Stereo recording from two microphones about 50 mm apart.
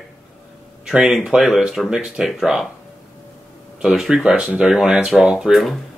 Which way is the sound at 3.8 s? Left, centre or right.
Centre.